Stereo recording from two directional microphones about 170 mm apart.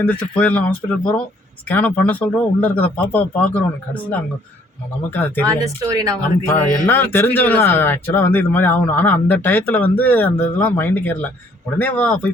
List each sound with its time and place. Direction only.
0.0 s speech: 10° left (ahead or behind)
5.8 s speech: 20° right (ahead or behind)
6.5 s speech: 15° left (ahead or behind)